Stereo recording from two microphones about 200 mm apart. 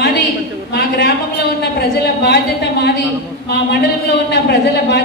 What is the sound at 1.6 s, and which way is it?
A woman's voice, 55° left (ahead or behind).